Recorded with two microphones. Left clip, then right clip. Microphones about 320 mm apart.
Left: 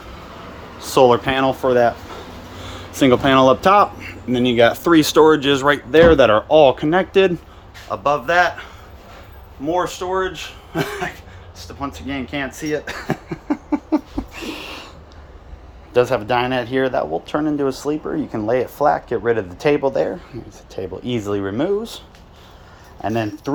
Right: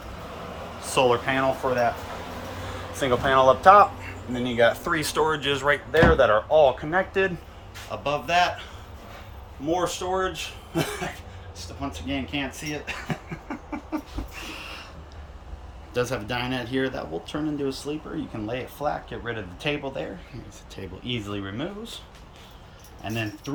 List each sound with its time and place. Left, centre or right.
0.8 s speech: centre
2.9 s speech: left
8.0 s speech: centre
9.7 s speech: centre
11.5 s cough: centre
15.9 s speech: centre